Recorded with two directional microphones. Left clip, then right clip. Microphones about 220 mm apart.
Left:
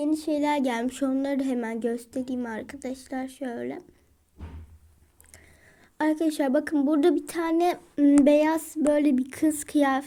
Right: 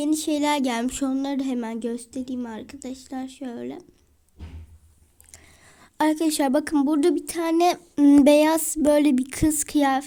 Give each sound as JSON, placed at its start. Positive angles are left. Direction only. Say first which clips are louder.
{"t": 0.0, "sound": "speech", "louder": "right 2 dB", "side_deg": -35}
{"t": 5.3, "sound": "speech", "louder": "right 3 dB", "side_deg": -30}
{"t": 7.5, "sound": "speech", "louder": "right 5 dB", "side_deg": -30}